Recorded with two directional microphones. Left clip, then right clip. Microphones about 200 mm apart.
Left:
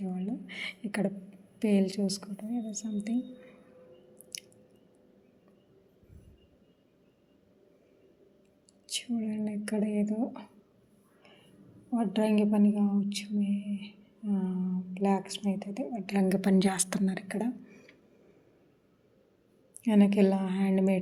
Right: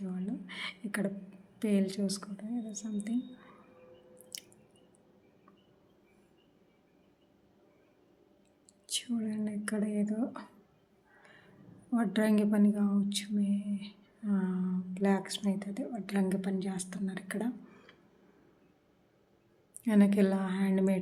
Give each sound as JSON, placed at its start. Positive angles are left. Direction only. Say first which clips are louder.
{"t": 0.0, "sound": "a sound", "louder": "left 3 dB", "side_deg": 5}
{"t": 1.5, "sound": "a woman's voice", "louder": "left 4 dB", "side_deg": 10}
{"t": 4.3, "sound": "squish", "louder": "left 3 dB", "side_deg": 10}
{"t": 8.9, "sound": "speech", "louder": "left 1 dB", "side_deg": 5}
{"t": 11.9, "sound": "speech", "louder": "left 2 dB", "side_deg": -5}
{"t": 16.3, "sound": "a woman's voice", "louder": "left 7 dB", "side_deg": 30}
{"t": 16.6, "sound": "a woman's voice", "louder": "left 10 dB", "side_deg": 50}
{"t": 17.2, "sound": "a sound", "louder": "left 3 dB", "side_deg": 10}
{"t": 19.8, "sound": "a woman's voice", "louder": "left 3 dB", "side_deg": 10}